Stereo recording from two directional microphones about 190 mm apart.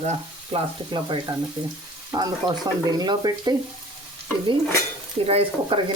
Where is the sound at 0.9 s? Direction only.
25° right (ahead or behind).